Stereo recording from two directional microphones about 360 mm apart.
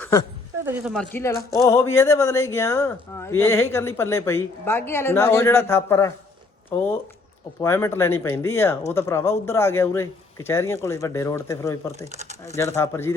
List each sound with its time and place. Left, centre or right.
0.0 s a sound: centre
0.6 s speech: centre
1.1 s speech: centre
12.1 s speech: centre
12.5 s speech: centre